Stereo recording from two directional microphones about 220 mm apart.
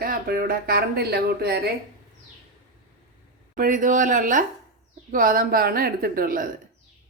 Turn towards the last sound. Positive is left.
turn(degrees=-40)  # may be behind; listen again after turning